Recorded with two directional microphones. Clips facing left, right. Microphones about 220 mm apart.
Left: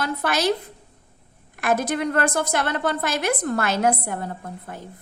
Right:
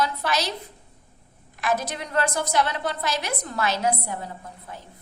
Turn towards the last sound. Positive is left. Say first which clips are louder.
# left 5 dB
turn(degrees=55)  # may be behind; listen again after turning